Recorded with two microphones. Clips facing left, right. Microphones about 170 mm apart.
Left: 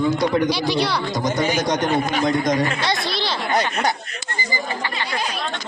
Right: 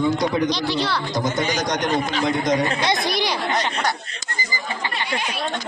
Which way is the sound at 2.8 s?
20° right (ahead or behind).